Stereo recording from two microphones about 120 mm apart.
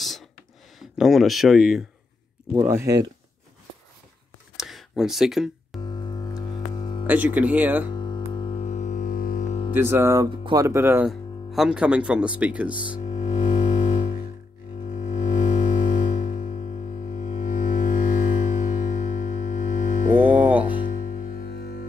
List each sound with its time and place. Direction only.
0.7 s speech: centre (ahead or behind)
2.5 s speech: 25° right (ahead or behind)
4.6 s a sound: centre (ahead or behind)
5.8 s music: 35° left (ahead or behind)
7.1 s speech: 15° right (ahead or behind)
7.9 s music: 40° left (ahead or behind)
8.5 s music: 70° left (ahead or behind); by 9.6 s 90° left
9.8 s speech: 20° right (ahead or behind)
11.1 s speech: 5° right (ahead or behind)
13.0 s music: 75° left (ahead or behind)
14.9 s music: 75° left (ahead or behind); by 20.1 s 90° left
20.2 s hum: 15° right (ahead or behind)
20.8 s music: 90° left